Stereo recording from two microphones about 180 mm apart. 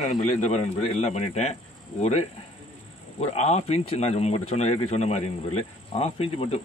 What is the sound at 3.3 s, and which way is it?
A man's voice, 35° left (ahead or behind).